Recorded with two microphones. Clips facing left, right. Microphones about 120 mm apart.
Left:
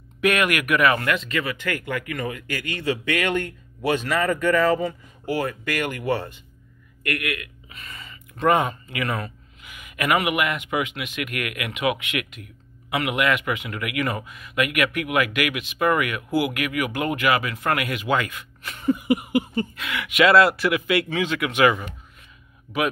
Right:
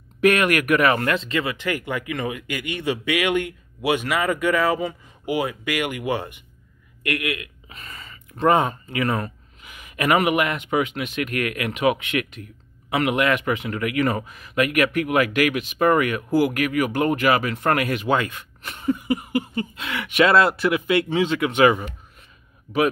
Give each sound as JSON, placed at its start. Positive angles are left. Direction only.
{"t": 0.2, "sound": "a man's voice", "side_deg": -35}
{"t": 7.7, "sound": "speech", "side_deg": -35}
{"t": 18.9, "sound": "a sound", "side_deg": 10}
{"t": 19.7, "sound": "speech", "side_deg": -35}